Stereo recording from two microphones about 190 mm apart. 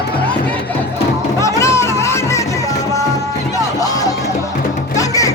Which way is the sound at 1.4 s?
15° left (ahead or behind).